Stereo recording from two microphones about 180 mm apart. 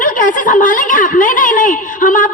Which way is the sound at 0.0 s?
50° left (ahead or behind).